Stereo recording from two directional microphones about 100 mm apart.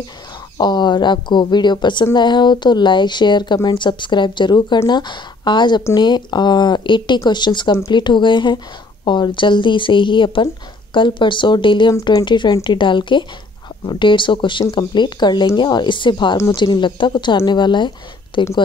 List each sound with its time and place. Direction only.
0.6 s a woman's voice: 50° left (ahead or behind)
12.0 s a woman's voice: 45° left (ahead or behind)